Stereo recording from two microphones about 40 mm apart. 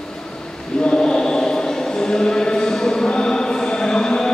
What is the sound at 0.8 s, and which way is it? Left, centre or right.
Chant, centre.